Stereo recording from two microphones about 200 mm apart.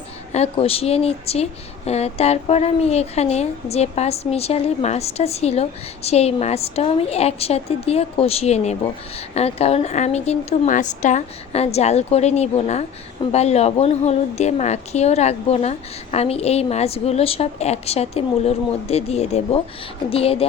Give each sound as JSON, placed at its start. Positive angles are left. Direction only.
{"t": 0.3, "sound": "speech", "side_deg": 30}